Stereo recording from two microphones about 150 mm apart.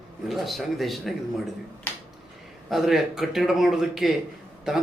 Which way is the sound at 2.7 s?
Centre (ahead or behind).